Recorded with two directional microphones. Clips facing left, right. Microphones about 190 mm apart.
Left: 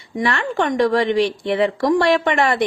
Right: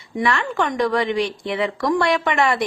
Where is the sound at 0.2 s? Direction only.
30° left (ahead or behind).